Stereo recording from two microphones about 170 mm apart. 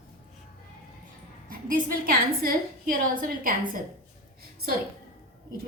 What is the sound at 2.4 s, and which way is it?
A woman's voice, 55° right (ahead or behind).